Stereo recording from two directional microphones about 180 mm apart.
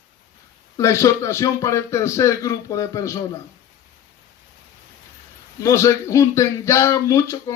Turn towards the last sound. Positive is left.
turn(degrees=15)  # may be behind; listen again after turning